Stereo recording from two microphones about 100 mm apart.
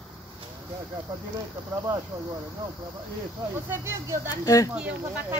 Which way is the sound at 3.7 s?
30° right (ahead or behind).